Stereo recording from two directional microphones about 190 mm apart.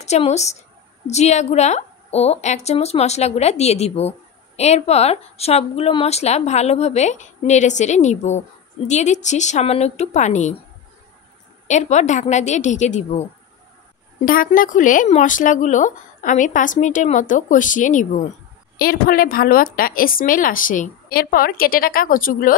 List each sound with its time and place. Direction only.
0.0 s a woman's voice: 35° left (ahead or behind)
11.6 s a woman's voice: 40° left (ahead or behind)
14.2 s speech: 45° left (ahead or behind)